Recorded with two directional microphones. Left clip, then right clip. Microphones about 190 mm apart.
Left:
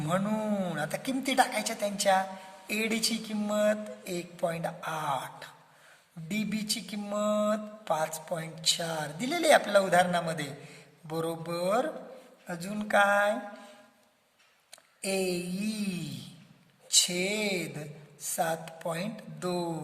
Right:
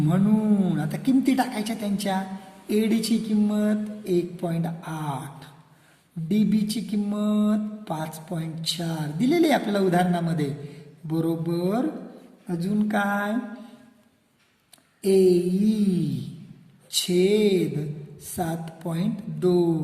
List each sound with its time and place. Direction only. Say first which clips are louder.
0.0 s mantra: right 5 dB; 35° left (ahead or behind)
15.0 s mantra: right 12 dB; 35° left (ahead or behind)